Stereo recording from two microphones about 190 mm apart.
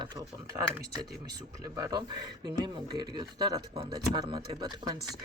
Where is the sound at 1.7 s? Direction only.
15° right (ahead or behind).